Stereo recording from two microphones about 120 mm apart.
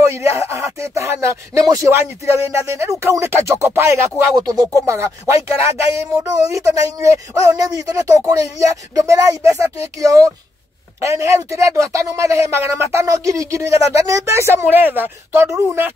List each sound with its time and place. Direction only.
0.0 s speech: 20° right (ahead or behind)